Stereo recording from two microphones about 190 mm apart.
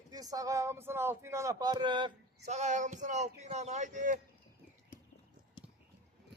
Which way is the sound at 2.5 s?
40° right (ahead or behind).